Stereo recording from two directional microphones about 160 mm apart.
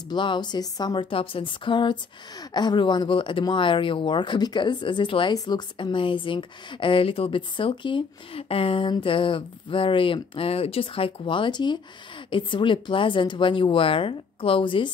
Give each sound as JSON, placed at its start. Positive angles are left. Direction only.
{"t": 0.1, "sound": "a woman's voice", "side_deg": 30}